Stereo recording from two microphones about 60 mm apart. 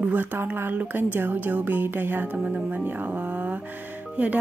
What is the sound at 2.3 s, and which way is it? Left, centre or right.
Speech, centre.